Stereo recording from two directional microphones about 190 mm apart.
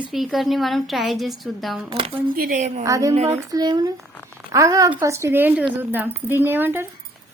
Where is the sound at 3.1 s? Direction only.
35° right (ahead or behind).